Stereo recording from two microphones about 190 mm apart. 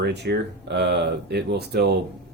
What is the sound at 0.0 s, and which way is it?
Speech, 60° right (ahead or behind).